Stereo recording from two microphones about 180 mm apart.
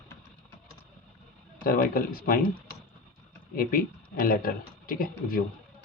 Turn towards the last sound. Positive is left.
turn(degrees=55)  # may be behind; listen again after turning